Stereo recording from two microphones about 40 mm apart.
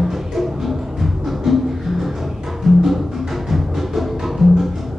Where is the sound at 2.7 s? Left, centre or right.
Centre.